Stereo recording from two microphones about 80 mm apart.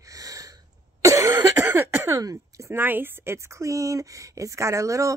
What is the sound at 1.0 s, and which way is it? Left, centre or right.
Cough, right.